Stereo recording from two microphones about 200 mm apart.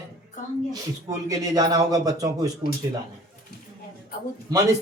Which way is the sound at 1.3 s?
20° right (ahead or behind).